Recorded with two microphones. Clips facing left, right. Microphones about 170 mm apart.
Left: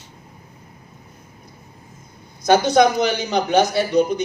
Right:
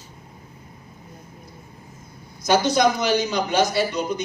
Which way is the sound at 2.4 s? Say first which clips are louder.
Left 4 dB; 55° left (ahead or behind).